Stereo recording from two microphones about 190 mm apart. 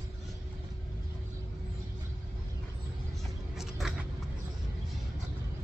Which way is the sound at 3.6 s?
Centre (ahead or behind).